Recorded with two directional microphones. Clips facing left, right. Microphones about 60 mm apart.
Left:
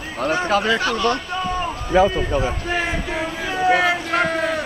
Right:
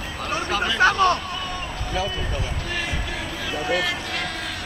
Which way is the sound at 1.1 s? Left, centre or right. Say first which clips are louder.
Left 5 dB; left.